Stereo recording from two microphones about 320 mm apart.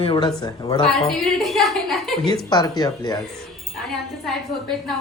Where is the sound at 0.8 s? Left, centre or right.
Centre.